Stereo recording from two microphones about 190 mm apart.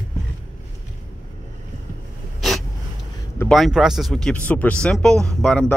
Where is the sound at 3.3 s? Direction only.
5° left (ahead or behind).